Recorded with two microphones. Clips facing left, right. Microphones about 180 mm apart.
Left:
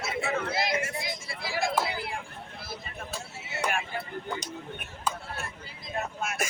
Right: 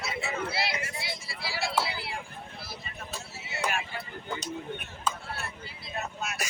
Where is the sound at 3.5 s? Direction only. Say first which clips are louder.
Left 2 dB; 50° left (ahead or behind).